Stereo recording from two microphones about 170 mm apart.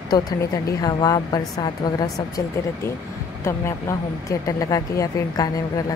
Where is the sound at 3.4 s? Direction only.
15° left (ahead or behind).